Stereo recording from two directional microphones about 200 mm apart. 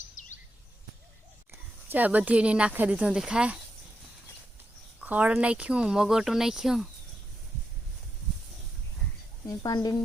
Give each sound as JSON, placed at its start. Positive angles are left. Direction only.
{"t": 0.2, "sound": "bird vocalization", "side_deg": 40}
{"t": 1.9, "sound": "speech", "side_deg": -10}
{"t": 4.9, "sound": "speech", "side_deg": -5}
{"t": 9.5, "sound": "speech", "side_deg": 20}